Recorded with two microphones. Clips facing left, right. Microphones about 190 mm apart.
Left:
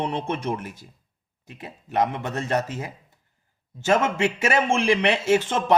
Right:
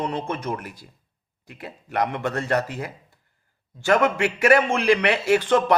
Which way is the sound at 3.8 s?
25° left (ahead or behind).